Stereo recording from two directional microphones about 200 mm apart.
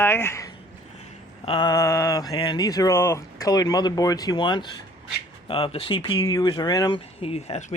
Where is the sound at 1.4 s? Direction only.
25° left (ahead or behind).